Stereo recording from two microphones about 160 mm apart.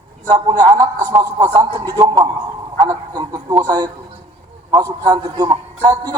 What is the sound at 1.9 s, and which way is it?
A man's voice, 25° right (ahead or behind).